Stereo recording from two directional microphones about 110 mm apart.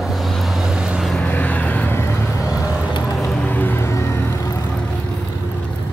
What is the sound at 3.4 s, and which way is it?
Vehicle, 15° left (ahead or behind).